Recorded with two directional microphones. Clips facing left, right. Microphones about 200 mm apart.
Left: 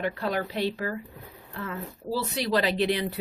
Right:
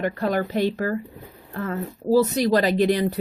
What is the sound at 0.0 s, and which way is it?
Speech, 45° right (ahead or behind).